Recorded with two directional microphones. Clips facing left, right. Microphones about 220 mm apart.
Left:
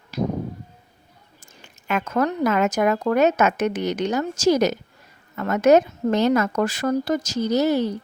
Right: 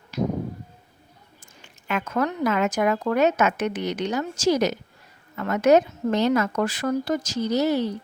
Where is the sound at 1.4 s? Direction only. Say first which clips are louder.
Left 2 dB; 45° left (ahead or behind).